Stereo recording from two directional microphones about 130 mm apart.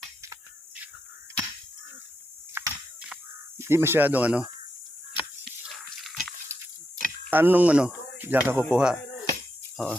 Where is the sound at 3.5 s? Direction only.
20° right (ahead or behind).